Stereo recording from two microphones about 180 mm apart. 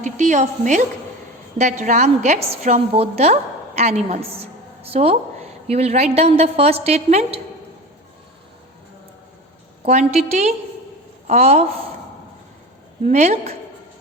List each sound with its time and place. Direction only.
0.0 s a woman's voice: 40° right (ahead or behind)
9.8 s a woman's voice: 40° right (ahead or behind)
13.1 s a woman's voice: 40° right (ahead or behind)